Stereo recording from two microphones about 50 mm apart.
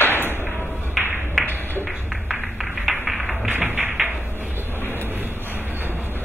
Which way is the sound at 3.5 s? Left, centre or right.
Right.